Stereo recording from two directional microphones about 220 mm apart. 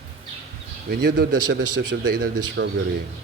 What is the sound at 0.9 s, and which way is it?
A man's voice, 45° right (ahead or behind).